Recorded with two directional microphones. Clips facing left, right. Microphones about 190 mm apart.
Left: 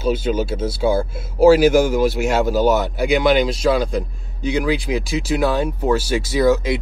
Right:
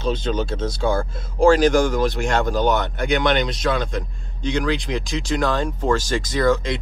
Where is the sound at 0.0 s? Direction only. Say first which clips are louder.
Left 3 dB; 10° left (ahead or behind).